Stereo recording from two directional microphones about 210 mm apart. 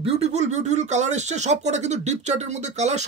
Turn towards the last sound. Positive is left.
turn(degrees=-35)  # may be behind; listen again after turning